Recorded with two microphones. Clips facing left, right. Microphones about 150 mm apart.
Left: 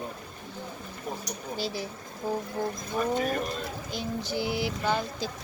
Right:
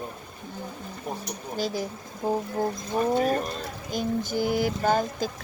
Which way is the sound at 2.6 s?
45° right (ahead or behind).